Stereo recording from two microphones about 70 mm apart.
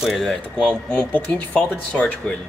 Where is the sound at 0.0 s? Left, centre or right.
Centre.